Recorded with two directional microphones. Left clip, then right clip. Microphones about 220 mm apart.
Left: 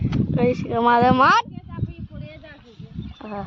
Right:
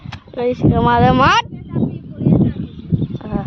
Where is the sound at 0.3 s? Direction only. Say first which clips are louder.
Right 5 dB; centre (ahead or behind).